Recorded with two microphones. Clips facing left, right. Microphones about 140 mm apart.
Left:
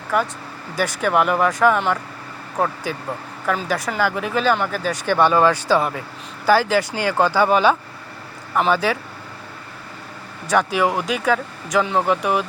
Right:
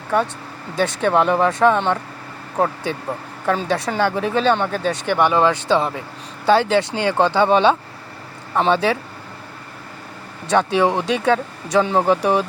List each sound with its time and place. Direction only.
0.8 s speech: 25° right (ahead or behind)
3.4 s speech: 30° right (ahead or behind)
10.4 s speech: 25° right (ahead or behind)